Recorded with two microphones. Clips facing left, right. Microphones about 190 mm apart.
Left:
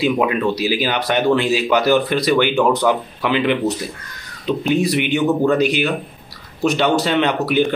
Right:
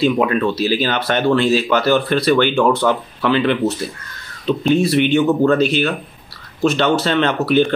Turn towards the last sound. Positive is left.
turn(degrees=15)  # may be behind; listen again after turning